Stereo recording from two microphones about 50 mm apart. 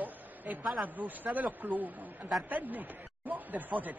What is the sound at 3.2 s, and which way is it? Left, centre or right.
Speech, right.